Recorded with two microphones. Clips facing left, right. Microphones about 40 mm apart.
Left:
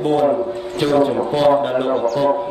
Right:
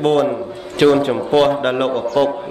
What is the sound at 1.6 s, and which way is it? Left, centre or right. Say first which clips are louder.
Speech: right 1 dB; right.